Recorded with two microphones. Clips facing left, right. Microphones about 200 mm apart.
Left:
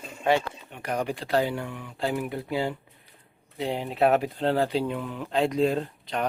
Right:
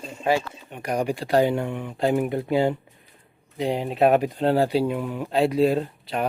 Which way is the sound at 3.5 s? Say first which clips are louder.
Right 4 dB; 15° right (ahead or behind).